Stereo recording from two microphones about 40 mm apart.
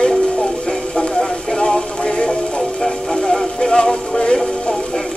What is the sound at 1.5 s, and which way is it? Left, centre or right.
Music, centre.